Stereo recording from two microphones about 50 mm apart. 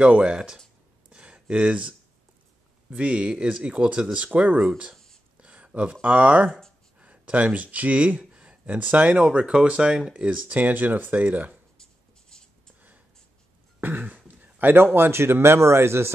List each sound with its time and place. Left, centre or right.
0.0 s speech: right
1.1 s a sound: right
2.9 s speech: right
4.9 s a sound: centre
5.4 s speech: right
8.6 s speech: right
9.3 s speech: centre
10.2 s speech: right
11.8 s writing: centre
13.7 s speech: right